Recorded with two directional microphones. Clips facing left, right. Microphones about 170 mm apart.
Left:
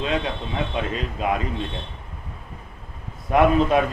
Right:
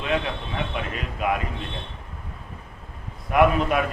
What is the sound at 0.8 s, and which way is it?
Speech, 25° left (ahead or behind).